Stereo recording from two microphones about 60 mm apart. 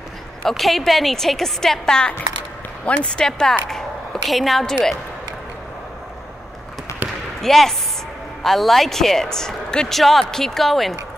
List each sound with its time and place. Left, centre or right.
0.4 s a woman's voice: centre
7.0 s basketball bounce: right
7.4 s a woman's voice: centre